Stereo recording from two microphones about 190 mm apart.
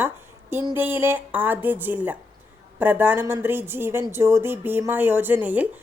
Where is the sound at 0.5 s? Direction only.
10° right (ahead or behind).